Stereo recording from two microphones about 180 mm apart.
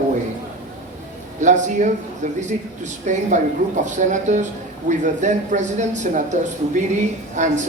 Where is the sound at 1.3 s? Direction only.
40° right (ahead or behind).